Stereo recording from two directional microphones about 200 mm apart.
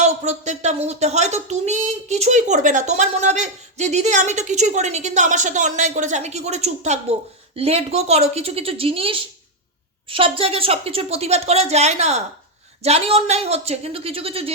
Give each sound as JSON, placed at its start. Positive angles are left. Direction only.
{"t": 0.0, "sound": "a woman's voice", "side_deg": -35}